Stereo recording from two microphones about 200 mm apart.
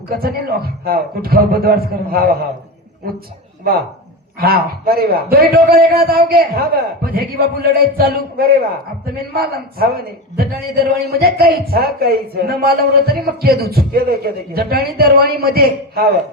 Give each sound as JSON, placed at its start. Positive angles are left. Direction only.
{"t": 0.1, "sound": "a man's voice", "side_deg": -50}
{"t": 4.4, "sound": "a man's voice", "side_deg": -50}